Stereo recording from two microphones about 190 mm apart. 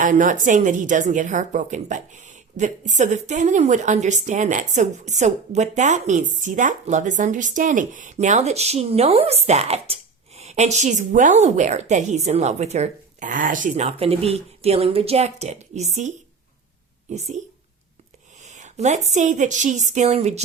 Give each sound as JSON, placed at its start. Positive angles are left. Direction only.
{"t": 0.0, "sound": "a woman's voice", "side_deg": -40}
{"t": 17.2, "sound": "a woman's voice", "side_deg": -35}